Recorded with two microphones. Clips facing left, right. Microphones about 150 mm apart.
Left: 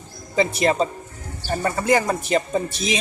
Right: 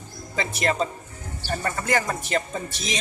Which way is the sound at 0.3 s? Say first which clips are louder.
Left 6 dB; 20° left (ahead or behind).